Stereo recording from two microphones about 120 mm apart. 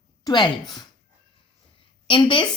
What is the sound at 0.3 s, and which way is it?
Speech, 40° left (ahead or behind).